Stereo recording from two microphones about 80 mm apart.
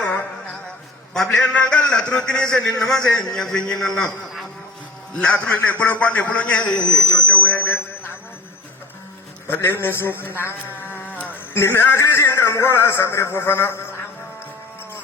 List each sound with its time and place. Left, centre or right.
0.0 s music: left
1.1 s a man's voice: centre
5.2 s a man's voice: centre
7.3 s a sound: centre
9.5 s a man's voice: left
10.2 s a sound: left
11.6 s a man's voice: left